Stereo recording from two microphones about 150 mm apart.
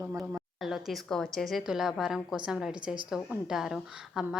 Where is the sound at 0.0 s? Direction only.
20° right (ahead or behind).